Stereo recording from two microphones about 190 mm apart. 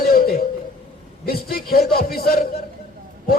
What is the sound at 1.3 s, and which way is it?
A man's voice, 55° left (ahead or behind).